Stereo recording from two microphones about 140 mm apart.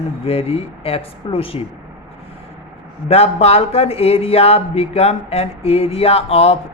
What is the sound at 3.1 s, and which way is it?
Speech, 45° left (ahead or behind).